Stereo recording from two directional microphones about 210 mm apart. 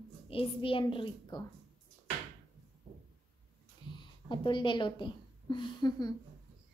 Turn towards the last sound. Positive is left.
turn(degrees=20)  # may be behind; listen again after turning